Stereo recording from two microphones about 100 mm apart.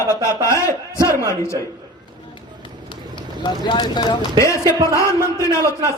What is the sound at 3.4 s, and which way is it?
Speech, 50° left (ahead or behind).